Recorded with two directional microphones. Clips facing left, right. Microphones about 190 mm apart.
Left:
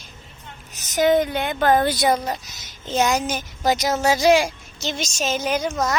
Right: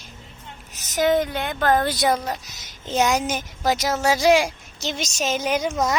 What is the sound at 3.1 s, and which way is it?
Speech, 20° right (ahead or behind).